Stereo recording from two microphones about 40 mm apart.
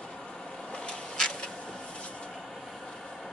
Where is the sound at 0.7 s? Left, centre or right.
Left.